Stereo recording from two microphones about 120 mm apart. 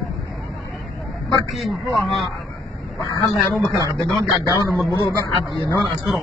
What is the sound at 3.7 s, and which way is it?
A man's voice, 30° left (ahead or behind).